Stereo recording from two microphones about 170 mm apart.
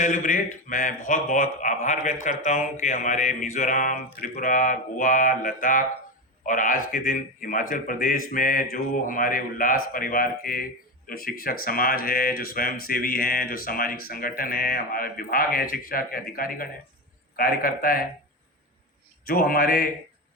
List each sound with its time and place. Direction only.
0.0 s mantra: 50° left (ahead or behind)
6.4 s a man's voice: 50° left (ahead or behind)
19.2 s a man's voice: 60° left (ahead or behind)